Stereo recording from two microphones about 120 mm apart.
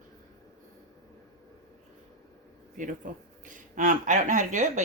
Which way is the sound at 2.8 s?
90° right.